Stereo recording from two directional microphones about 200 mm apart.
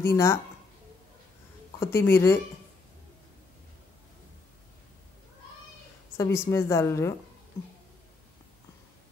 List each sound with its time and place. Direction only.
0.1 s a woman's voice: 15° left (ahead or behind)
1.8 s a woman's voice: 15° left (ahead or behind)
6.1 s a woman's voice: 15° left (ahead or behind)